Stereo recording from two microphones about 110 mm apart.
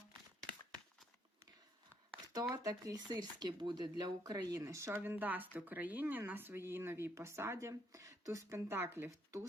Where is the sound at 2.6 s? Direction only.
35° right (ahead or behind).